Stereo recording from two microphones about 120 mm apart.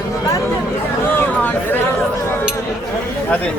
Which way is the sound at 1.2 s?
15° left (ahead or behind).